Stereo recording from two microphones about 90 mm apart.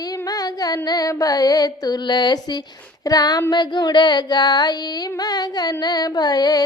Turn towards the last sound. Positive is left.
turn(degrees=50)  # may be behind; listen again after turning